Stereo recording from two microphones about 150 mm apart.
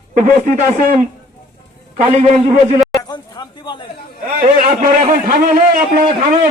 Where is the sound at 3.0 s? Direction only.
30° left (ahead or behind).